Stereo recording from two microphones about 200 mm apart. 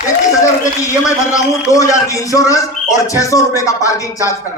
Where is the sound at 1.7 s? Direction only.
15° left (ahead or behind).